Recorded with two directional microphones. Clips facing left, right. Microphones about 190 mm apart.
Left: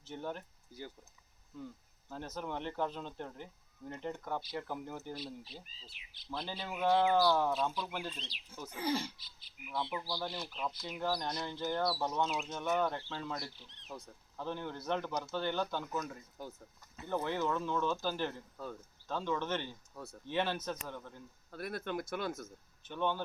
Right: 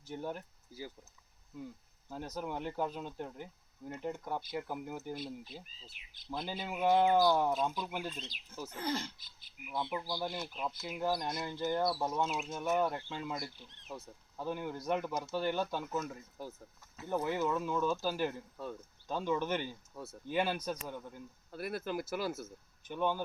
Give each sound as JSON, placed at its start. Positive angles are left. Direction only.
{"t": 0.0, "sound": "speech", "side_deg": -10}
{"t": 2.0, "sound": "speech", "side_deg": -10}
{"t": 5.1, "sound": "speech", "side_deg": -50}
{"t": 6.5, "sound": "speech", "side_deg": -15}
{"t": 8.7, "sound": "speech", "side_deg": 10}
{"t": 9.1, "sound": "speech", "side_deg": -50}
{"t": 10.0, "sound": "speech", "side_deg": -15}
{"t": 10.4, "sound": "speech", "side_deg": -5}
{"t": 11.8, "sound": "speech", "side_deg": -20}
{"t": 12.0, "sound": "speech", "side_deg": -5}